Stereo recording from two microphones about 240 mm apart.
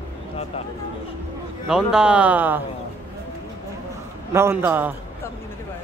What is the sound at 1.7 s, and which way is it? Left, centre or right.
Speech, centre.